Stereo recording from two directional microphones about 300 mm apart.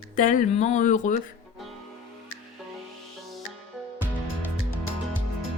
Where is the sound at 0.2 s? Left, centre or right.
Left.